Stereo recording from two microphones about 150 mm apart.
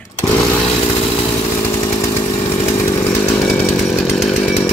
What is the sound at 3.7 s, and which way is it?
Chainsaw, centre (ahead or behind).